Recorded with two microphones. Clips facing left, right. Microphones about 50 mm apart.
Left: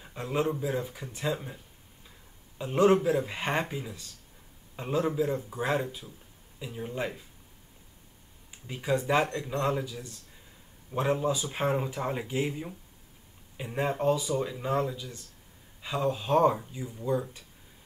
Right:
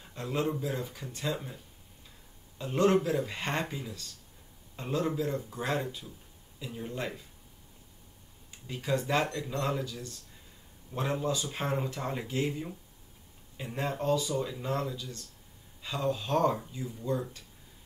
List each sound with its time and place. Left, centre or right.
0.0 s speech: centre
2.6 s speech: centre
8.5 s speech: centre